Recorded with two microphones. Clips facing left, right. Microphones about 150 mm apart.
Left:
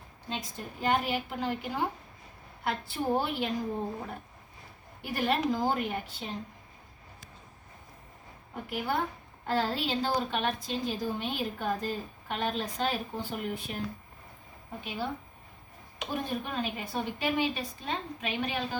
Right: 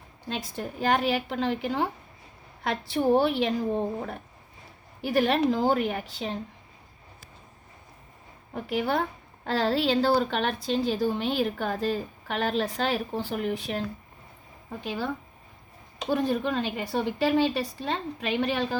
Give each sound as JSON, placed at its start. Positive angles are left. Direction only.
{"t": 0.3, "sound": "a woman's voice", "side_deg": -85}
{"t": 8.7, "sound": "a woman's voice", "side_deg": -80}
{"t": 14.8, "sound": "a woman's voice", "side_deg": -90}